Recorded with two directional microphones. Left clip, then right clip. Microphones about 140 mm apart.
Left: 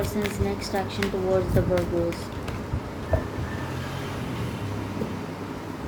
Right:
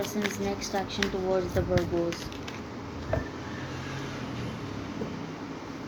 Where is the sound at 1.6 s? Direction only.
40° right (ahead or behind).